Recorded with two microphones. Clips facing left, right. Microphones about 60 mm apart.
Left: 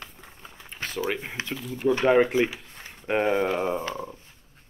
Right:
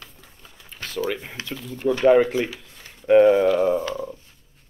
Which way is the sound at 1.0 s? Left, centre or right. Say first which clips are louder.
Right 1 dB; left.